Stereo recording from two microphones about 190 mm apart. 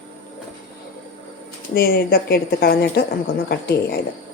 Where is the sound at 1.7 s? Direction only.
55° left (ahead or behind).